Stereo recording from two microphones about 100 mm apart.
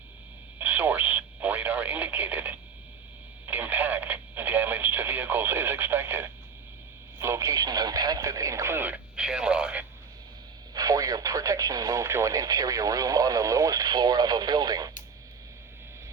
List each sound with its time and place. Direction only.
0.6 s radio: 15° right (ahead or behind)
3.4 s speech: 15° right (ahead or behind)
9.1 s speech: 10° right (ahead or behind)
10.8 s speech: 35° right (ahead or behind)